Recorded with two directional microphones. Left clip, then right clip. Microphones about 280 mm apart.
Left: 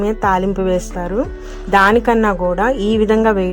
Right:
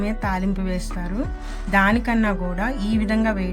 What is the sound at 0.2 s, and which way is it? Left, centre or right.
Speech, left.